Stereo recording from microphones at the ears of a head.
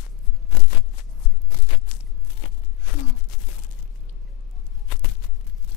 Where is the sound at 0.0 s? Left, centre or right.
Left.